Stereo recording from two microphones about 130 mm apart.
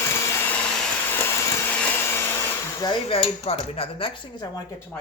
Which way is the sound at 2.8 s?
40° left (ahead or behind).